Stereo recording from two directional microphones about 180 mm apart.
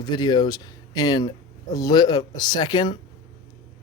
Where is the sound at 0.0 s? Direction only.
25° left (ahead or behind).